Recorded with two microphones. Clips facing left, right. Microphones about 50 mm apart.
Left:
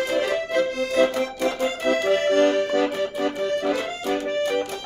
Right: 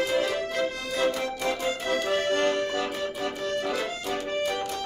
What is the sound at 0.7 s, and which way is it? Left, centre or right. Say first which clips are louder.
Music: left 7 dB; left.